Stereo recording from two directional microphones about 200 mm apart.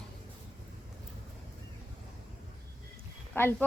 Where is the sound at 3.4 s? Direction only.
10° left (ahead or behind).